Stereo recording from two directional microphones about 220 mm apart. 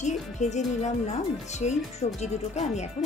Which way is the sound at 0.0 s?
30° left (ahead or behind).